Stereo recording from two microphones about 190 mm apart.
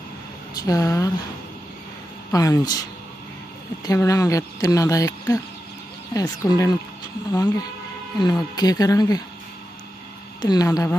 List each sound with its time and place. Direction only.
0.6 s speech: 20° left (ahead or behind)
2.3 s speech: 20° left (ahead or behind)
3.8 s speech: 15° left (ahead or behind)
8.2 s speech: 20° left (ahead or behind)
10.4 s speech: 20° left (ahead or behind)